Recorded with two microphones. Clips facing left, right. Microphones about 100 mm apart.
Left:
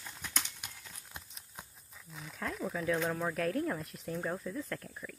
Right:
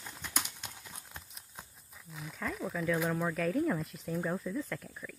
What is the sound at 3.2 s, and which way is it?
Speech, 5° left (ahead or behind).